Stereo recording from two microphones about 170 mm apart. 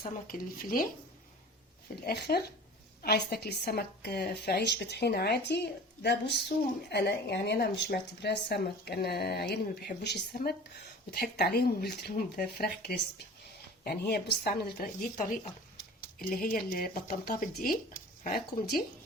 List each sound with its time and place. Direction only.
0.0 s speech: 55° left (ahead or behind)
2.0 s speech: 70° left (ahead or behind); by 18.4 s 55° left (ahead or behind)